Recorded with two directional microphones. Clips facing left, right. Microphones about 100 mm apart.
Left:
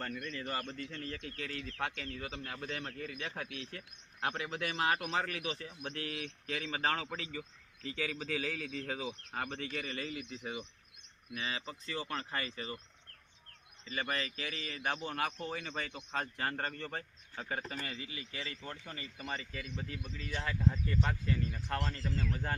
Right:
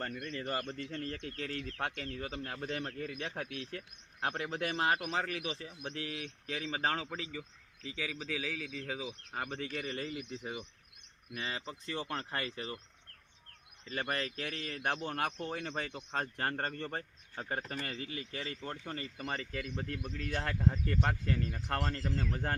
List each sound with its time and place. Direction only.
0.0 s speech: 30° right (ahead or behind)
5.0 s speech: 15° right (ahead or behind)
8.2 s a man's voice: 5° right (ahead or behind)
9.0 s speech: 20° right (ahead or behind)
10.2 s speech: 15° right (ahead or behind)
11.9 s speech: 55° right (ahead or behind)
14.0 s a man's voice: 50° right (ahead or behind)